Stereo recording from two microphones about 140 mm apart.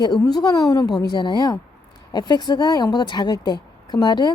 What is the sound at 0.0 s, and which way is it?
Speech, 30° left (ahead or behind).